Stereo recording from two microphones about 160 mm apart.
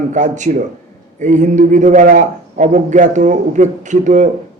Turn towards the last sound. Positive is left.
turn(degrees=-50)  # may be behind; listen again after turning